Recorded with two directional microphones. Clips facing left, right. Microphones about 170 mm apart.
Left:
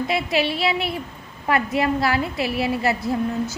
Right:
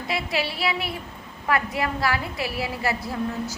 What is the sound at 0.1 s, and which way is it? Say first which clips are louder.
A woman's voice: left 2 dB; 20° left (ahead or behind).